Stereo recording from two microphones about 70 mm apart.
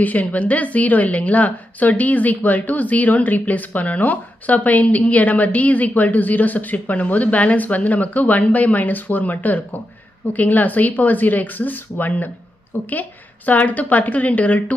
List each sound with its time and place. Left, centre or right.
0.0 s a woman's voice: left